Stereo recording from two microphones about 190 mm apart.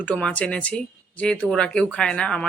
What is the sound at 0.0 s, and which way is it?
Speech, 5° left (ahead or behind).